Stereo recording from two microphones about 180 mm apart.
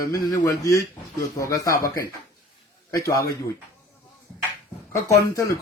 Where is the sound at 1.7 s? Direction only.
50° left (ahead or behind).